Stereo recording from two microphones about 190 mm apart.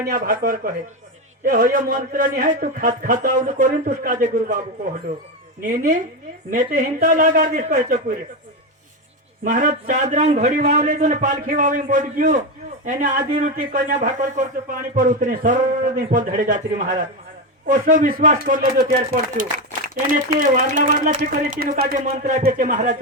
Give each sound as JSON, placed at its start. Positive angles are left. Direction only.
{"t": 0.1, "sound": "a man's voice", "side_deg": -45}
{"t": 9.4, "sound": "a man's voice", "side_deg": -45}